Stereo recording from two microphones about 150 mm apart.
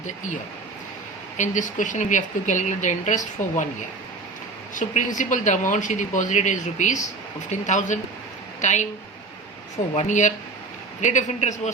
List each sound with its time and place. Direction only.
1.4 s speech: 55° left (ahead or behind)
4.7 s speech: 55° left (ahead or behind)
9.9 s speech: 50° left (ahead or behind)